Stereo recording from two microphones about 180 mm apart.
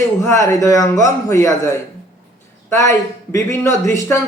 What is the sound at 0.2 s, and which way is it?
A man's voice, 15° left (ahead or behind).